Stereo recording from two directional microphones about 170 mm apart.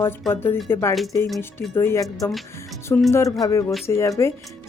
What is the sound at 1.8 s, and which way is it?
Speech, 15° left (ahead or behind).